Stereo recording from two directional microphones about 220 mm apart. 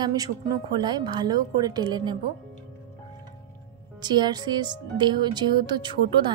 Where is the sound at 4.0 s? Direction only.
20° right (ahead or behind).